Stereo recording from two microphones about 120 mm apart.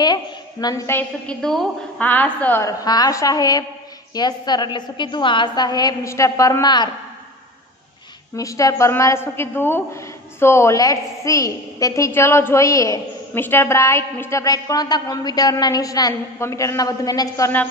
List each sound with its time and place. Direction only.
0.0 s a woman's voice: 35° left (ahead or behind)
1.2 s a woman's voice: 5° left (ahead or behind)
2.6 s a woman's voice: 30° left (ahead or behind)
8.4 s a woman's voice: 30° left (ahead or behind)